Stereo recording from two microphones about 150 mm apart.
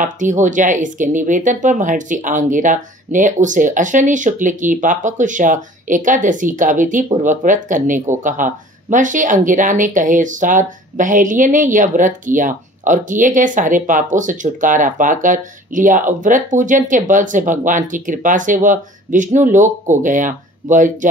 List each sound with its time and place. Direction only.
0.0 s speech: 55° right (ahead or behind)